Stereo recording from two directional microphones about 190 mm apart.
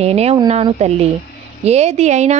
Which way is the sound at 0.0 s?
35° right (ahead or behind).